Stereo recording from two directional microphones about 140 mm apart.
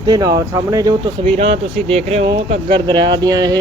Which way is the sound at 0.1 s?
25° right (ahead or behind).